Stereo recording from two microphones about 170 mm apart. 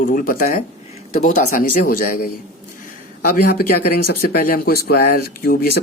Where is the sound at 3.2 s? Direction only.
60° left (ahead or behind).